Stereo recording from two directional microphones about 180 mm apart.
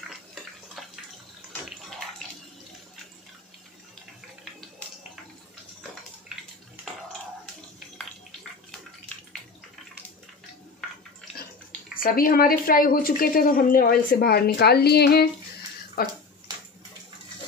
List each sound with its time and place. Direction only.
12.0 s a woman's voice: 55° left (ahead or behind)